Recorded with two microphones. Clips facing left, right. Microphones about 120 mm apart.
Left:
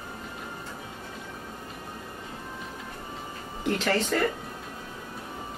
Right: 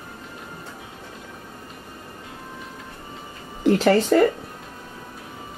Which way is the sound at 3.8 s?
40° right (ahead or behind).